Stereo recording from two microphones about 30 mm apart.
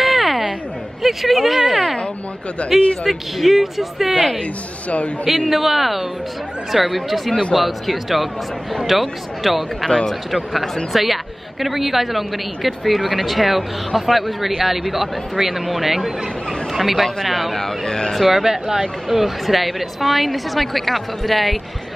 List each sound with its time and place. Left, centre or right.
0.0 s a sound: centre
1.0 s speech: centre
4.8 s speech: left
5.5 s speech: centre
9.8 s speech: left
10.3 s speech: centre
17.8 s speech: left
18.3 s speech: centre